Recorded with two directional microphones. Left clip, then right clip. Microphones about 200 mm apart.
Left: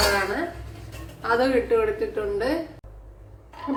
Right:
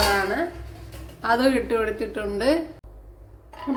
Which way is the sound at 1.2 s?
55° right (ahead or behind).